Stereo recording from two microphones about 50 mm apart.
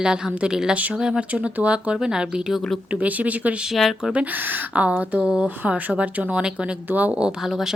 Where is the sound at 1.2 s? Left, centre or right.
Right.